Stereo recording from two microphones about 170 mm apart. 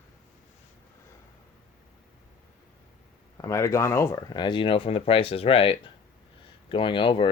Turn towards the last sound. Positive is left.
turn(degrees=30)  # may be behind; listen again after turning